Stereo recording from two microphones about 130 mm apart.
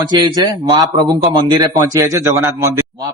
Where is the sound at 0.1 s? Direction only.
35° right (ahead or behind).